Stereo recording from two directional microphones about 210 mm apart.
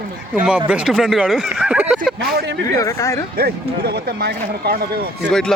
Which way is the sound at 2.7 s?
15° left (ahead or behind).